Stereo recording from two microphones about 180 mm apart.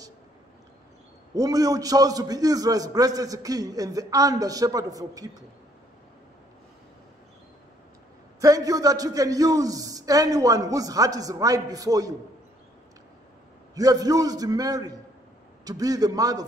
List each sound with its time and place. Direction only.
1.3 s a man's voice: 20° right (ahead or behind)
8.4 s a man's voice: 20° right (ahead or behind)
13.7 s a man's voice: 20° right (ahead or behind)